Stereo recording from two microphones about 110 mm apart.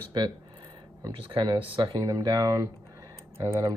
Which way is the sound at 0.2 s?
45° right (ahead or behind).